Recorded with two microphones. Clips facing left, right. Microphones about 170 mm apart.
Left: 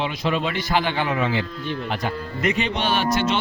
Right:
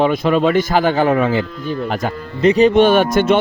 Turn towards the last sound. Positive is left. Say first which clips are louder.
# right 9 dB
turn(degrees=-50)  # may be behind; listen again after turning